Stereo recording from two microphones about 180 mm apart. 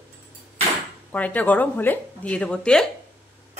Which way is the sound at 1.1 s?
10° left (ahead or behind).